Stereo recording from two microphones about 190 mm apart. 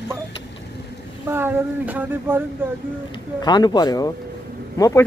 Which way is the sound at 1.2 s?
10° right (ahead or behind).